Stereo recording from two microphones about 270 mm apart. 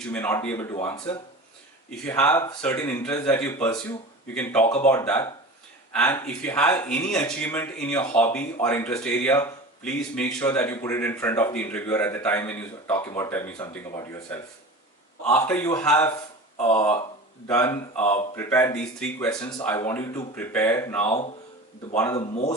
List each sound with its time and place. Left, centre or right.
0.1 s speech: centre
16.0 s speech: centre
17.5 s speech: centre
22.2 s speech: centre